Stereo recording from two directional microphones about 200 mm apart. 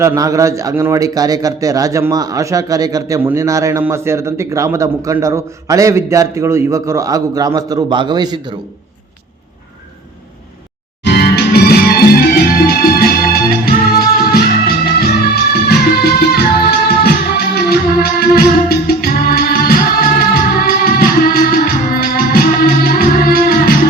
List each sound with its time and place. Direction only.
0.0 s a man's voice: 15° right (ahead or behind)
11.0 s music: 50° left (ahead or behind)